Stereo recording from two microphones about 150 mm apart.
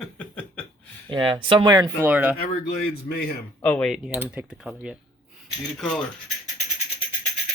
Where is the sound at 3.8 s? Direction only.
5° right (ahead or behind).